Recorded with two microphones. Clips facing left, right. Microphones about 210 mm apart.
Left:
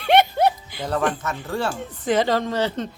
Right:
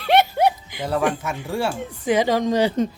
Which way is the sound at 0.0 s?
Centre (ahead or behind).